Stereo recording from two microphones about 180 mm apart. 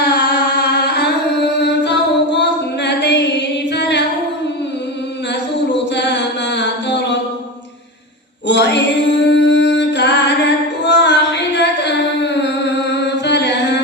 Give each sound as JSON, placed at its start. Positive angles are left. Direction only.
{"t": 0.0, "sound": "music", "side_deg": 65}
{"t": 3.7, "sound": "a sound", "side_deg": 70}
{"t": 5.3, "sound": "mantra", "side_deg": 75}
{"t": 8.4, "sound": "music", "side_deg": 70}
{"t": 12.9, "sound": "singing", "side_deg": 75}